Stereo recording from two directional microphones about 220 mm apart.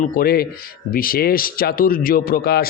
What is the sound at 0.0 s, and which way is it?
A man's voice, 40° left (ahead or behind).